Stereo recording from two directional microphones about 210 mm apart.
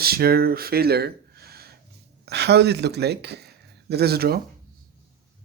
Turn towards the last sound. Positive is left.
turn(degrees=-50)  # may be behind; listen again after turning